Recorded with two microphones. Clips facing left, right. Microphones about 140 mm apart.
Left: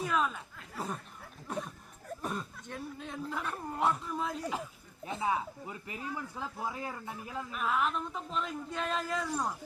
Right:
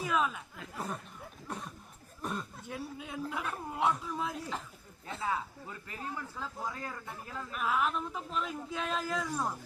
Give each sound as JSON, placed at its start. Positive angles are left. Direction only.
{"t": 0.0, "sound": "speech", "side_deg": 0}
{"t": 5.0, "sound": "speech", "side_deg": 15}
{"t": 7.5, "sound": "speech", "side_deg": 0}